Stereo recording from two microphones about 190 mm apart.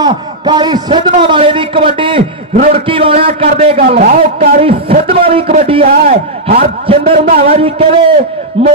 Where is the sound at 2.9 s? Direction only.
30° right (ahead or behind).